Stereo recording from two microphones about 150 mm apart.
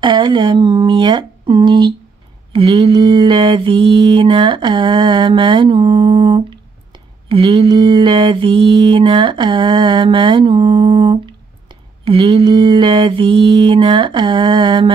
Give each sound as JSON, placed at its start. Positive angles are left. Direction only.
{"t": 0.0, "sound": "speech", "side_deg": -35}
{"t": 2.5, "sound": "mantra", "side_deg": -35}